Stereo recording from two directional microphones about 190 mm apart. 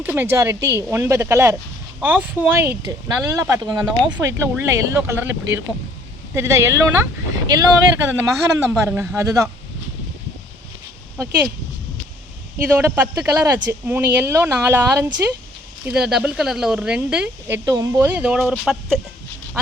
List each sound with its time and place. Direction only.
0.0 s speech: 10° right (ahead or behind)
12.7 s speech: 10° right (ahead or behind)